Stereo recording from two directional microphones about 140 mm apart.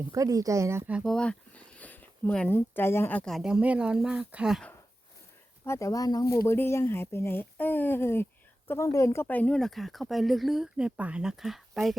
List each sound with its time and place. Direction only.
0.1 s speech: 25° right (ahead or behind)
0.9 s speech: 5° left (ahead or behind)
3.3 s speech: 5° right (ahead or behind)
5.6 s speech: 20° left (ahead or behind); by 11.9 s centre (ahead or behind)